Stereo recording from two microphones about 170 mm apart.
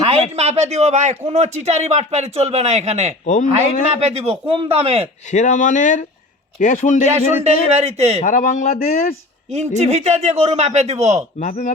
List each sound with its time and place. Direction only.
0.0 s a man's voice: 35° right (ahead or behind)
3.2 s speech: 50° left (ahead or behind)
4.0 s a man's voice: 35° right (ahead or behind)
5.3 s speech: 45° left (ahead or behind)
7.7 s a man's voice: 40° right (ahead or behind)
8.2 s speech: 50° left (ahead or behind)
9.5 s a man's voice: 40° right (ahead or behind)
11.3 s speech: 45° left (ahead or behind)